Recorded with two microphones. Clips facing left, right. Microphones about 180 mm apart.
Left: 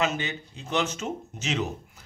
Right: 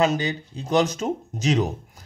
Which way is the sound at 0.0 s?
35° right (ahead or behind).